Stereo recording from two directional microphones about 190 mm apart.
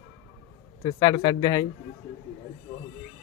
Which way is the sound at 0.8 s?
20° left (ahead or behind).